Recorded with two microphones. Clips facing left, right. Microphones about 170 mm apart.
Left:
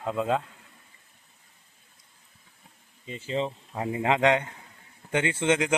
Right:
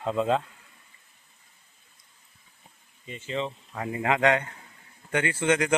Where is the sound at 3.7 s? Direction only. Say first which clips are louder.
Left 1 dB; 20° left (ahead or behind).